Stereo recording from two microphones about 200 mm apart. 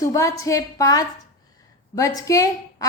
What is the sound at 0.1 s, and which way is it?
A woman's voice, 15° left (ahead or behind).